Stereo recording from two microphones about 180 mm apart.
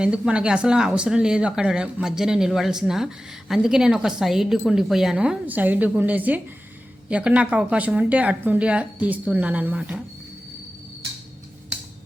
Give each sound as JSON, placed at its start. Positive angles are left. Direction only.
{"t": 0.0, "sound": "speech", "side_deg": -5}